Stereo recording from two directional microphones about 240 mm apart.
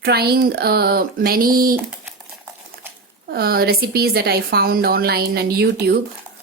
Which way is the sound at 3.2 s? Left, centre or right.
Right.